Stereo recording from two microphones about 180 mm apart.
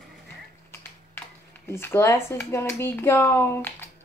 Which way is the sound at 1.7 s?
15° left (ahead or behind).